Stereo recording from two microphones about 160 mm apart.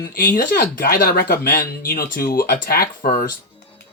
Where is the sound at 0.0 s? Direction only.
60° left (ahead or behind).